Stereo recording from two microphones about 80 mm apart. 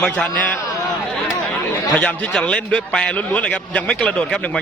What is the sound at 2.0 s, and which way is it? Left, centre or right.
A man's voice, centre.